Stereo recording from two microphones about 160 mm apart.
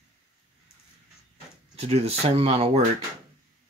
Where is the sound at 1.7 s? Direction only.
40° right (ahead or behind).